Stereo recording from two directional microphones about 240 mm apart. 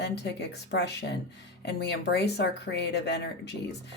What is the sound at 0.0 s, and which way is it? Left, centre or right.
Speech, left.